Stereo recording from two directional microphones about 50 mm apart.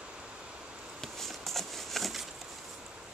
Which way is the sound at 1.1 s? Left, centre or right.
Centre.